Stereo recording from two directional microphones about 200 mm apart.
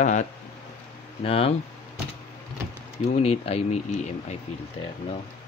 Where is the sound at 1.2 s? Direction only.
30° left (ahead or behind).